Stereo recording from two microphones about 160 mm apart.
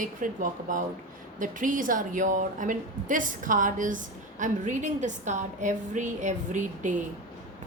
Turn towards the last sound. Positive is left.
turn(degrees=-50)  # may be behind; listen again after turning